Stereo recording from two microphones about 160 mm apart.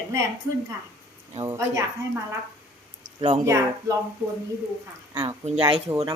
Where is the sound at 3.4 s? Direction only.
20° right (ahead or behind).